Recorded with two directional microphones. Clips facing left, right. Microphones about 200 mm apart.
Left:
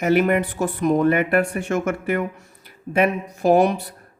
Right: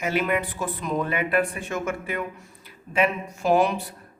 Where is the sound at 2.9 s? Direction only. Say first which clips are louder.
Left 4 dB; 45° left (ahead or behind).